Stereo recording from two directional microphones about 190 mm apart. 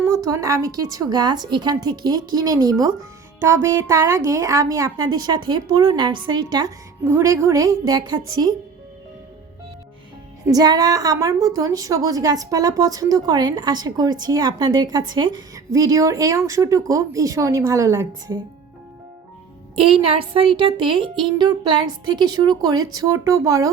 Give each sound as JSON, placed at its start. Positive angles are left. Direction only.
{"t": 0.3, "sound": "a woman's voice", "side_deg": -15}
{"t": 10.4, "sound": "a woman's voice", "side_deg": -20}
{"t": 19.7, "sound": "a woman's voice", "side_deg": -30}